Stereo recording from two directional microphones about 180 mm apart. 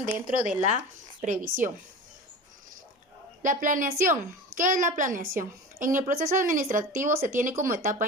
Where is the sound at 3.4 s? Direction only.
45° right (ahead or behind).